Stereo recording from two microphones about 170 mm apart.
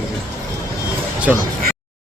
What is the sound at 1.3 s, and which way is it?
Speech, 5° right (ahead or behind).